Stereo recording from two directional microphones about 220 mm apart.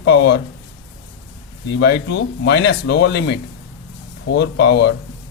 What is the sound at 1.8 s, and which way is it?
Speech, 50° left (ahead or behind).